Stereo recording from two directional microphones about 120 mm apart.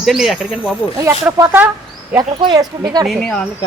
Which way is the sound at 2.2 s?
35° right (ahead or behind).